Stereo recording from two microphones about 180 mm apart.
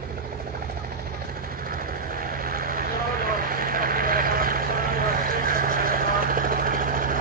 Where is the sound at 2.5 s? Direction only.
55° right (ahead or behind).